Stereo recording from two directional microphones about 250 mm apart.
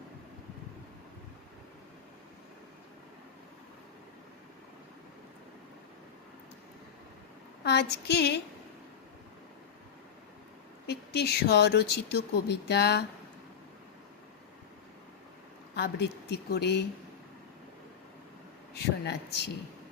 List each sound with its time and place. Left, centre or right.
7.6 s speech: left
10.8 s speech: left
15.7 s a sound: left
16.5 s speech: left
18.7 s speech: left